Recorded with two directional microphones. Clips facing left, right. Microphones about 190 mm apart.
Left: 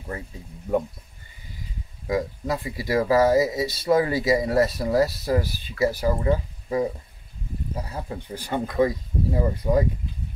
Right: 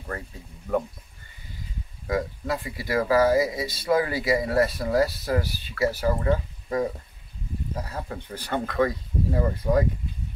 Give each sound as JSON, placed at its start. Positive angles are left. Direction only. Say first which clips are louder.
{"t": 2.0, "sound": "speech", "louder": "left 2 dB", "side_deg": 20}
{"t": 5.3, "sound": "speech", "louder": "left 2 dB", "side_deg": 15}